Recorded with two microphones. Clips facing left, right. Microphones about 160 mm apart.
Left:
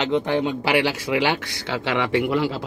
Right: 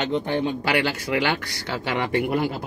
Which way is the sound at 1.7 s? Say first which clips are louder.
Left 2 dB; 80° left.